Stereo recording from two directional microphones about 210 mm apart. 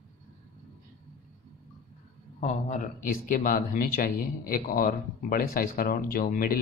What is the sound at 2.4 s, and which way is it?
A man's voice, 35° left (ahead or behind).